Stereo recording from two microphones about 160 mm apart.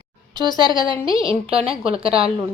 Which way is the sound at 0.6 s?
30° right (ahead or behind).